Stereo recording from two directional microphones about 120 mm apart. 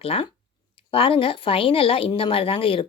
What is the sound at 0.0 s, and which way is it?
Speech, 55° left (ahead or behind).